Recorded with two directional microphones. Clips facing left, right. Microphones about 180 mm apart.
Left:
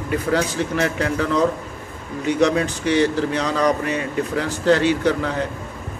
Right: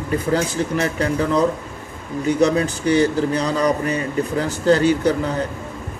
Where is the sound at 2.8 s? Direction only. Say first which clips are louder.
Right 2 dB; 40° right (ahead or behind).